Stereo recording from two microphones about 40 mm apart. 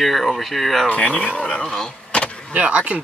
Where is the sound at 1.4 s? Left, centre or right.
Centre.